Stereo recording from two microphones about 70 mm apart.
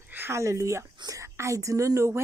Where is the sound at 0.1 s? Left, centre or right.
Right.